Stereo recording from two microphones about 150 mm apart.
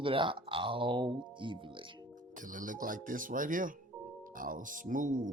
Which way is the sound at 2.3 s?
60° right (ahead or behind).